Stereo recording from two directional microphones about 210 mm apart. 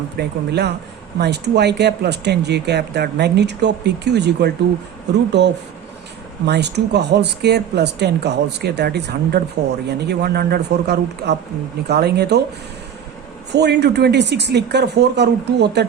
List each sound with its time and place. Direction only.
0.2 s speech: 50° right (ahead or behind)
13.5 s speech: 55° right (ahead or behind)